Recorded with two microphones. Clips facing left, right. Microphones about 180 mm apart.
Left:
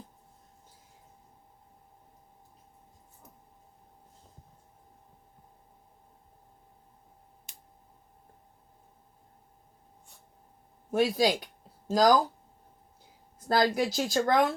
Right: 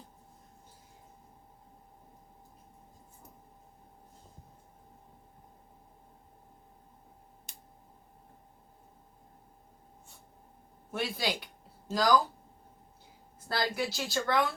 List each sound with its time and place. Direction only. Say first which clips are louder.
10.9 s speech: left 9 dB; 45° left (ahead or behind)
13.5 s speech: left 7 dB; 45° left (ahead or behind)